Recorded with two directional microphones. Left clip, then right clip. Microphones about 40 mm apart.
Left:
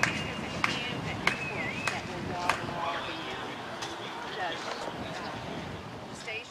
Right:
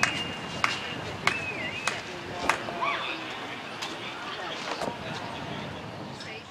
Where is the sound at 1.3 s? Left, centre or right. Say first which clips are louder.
Right 3 dB; right.